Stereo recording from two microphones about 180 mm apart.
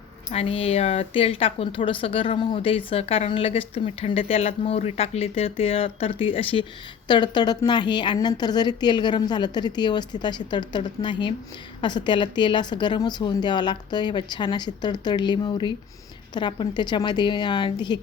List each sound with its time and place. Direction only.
0.3 s a woman's voice: 35° left (ahead or behind)